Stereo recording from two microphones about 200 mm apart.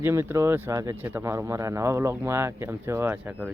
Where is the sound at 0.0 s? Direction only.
10° right (ahead or behind).